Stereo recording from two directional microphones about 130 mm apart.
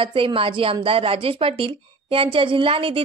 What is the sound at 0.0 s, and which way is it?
A woman's voice, 40° right (ahead or behind).